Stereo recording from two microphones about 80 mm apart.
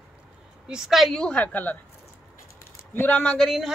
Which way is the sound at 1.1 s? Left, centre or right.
Centre.